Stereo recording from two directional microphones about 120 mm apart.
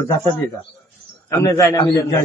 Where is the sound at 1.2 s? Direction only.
25° left (ahead or behind).